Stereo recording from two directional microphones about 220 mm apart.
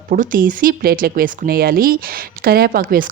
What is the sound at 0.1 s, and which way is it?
Speech, 40° right (ahead or behind).